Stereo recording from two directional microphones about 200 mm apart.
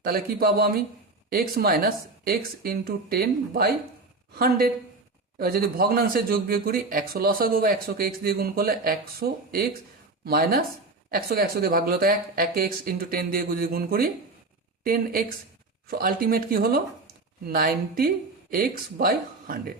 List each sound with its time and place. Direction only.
0.0 s speech: 50° right (ahead or behind)
15.9 s speech: 50° right (ahead or behind)